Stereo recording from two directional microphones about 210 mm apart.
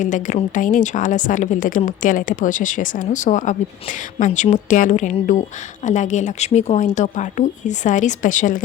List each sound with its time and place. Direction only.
0.0 s a woman's voice: 35° left (ahead or behind)